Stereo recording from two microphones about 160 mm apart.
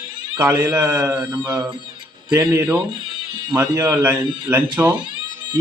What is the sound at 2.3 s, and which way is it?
A man's voice, 20° right (ahead or behind).